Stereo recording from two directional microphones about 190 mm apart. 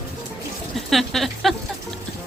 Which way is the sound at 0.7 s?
Centre (ahead or behind).